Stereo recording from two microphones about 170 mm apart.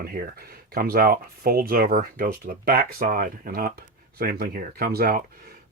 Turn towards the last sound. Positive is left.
turn(degrees=-60)  # may be behind; listen again after turning